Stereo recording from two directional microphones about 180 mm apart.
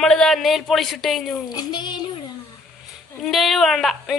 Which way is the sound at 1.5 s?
25° left (ahead or behind).